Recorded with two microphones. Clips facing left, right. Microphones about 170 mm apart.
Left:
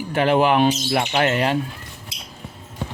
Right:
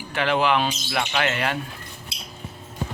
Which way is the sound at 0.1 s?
45° left (ahead or behind).